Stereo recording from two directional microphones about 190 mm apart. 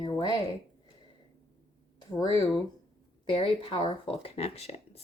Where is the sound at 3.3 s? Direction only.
30° left (ahead or behind).